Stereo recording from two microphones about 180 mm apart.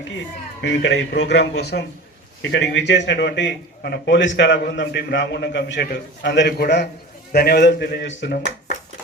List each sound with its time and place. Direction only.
0.6 s a man's voice: 75° left (ahead or behind)